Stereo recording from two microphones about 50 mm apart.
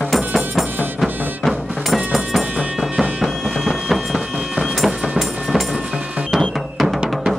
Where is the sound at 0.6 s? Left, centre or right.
Right.